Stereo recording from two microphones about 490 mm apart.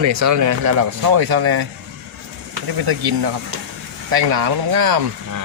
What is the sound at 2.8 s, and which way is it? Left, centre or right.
Speech, right.